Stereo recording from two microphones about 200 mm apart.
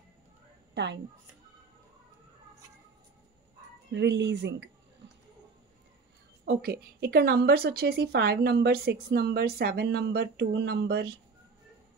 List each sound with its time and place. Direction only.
0.7 s speech: 60° right (ahead or behind)
3.9 s speech: 60° right (ahead or behind)
6.4 s a woman's voice: 50° right (ahead or behind)